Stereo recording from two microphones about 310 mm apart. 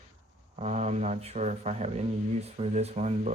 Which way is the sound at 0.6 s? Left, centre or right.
Right.